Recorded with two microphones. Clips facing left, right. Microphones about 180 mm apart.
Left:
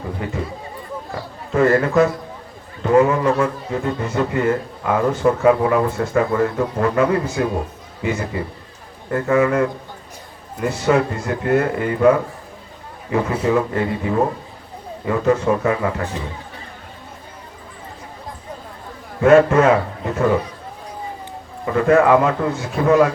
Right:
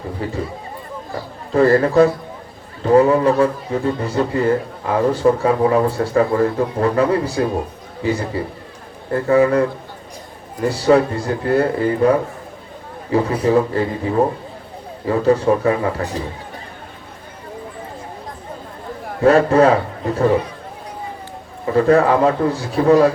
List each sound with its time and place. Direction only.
0.2 s a man's voice: 35° right (ahead or behind)
1.5 s a man's voice: 35° right (ahead or behind)
19.2 s a man's voice: 35° right (ahead or behind)
21.7 s a man's voice: 35° right (ahead or behind)